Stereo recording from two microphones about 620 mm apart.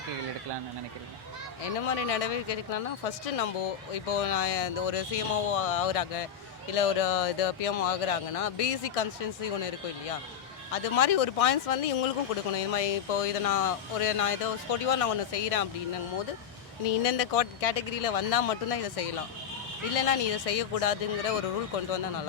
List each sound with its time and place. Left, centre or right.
1.9 s speech: left
16.8 s speech: left